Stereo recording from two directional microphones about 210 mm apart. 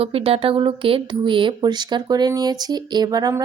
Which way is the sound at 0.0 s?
25° right (ahead or behind).